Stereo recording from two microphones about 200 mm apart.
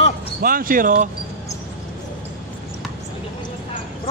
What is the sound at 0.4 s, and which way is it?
Speech, 45° right (ahead or behind).